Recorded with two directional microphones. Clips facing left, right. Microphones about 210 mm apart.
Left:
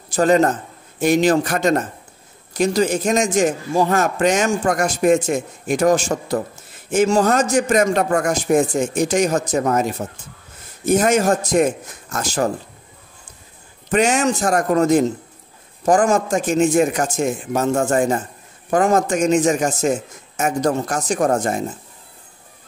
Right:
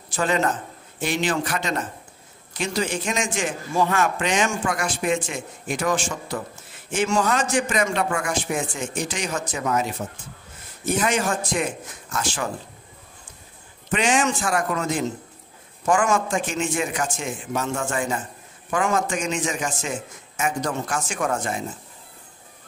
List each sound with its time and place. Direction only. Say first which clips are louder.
0.1 s a man's voice: left 8 dB; 40° left (ahead or behind)
13.8 s a man's voice: left 5 dB; 45° left (ahead or behind)